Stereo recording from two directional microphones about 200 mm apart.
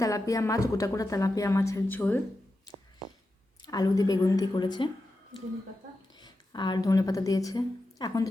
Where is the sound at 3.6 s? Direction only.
20° left (ahead or behind).